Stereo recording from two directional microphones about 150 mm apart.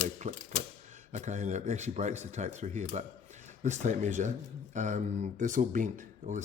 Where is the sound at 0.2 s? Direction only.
55° right (ahead or behind).